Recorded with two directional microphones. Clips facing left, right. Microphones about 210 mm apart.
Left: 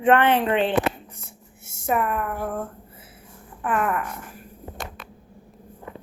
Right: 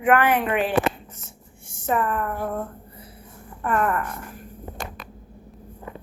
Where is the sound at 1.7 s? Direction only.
10° left (ahead or behind).